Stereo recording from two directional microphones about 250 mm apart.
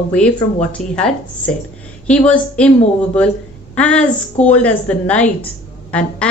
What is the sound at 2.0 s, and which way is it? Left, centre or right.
Speech, centre.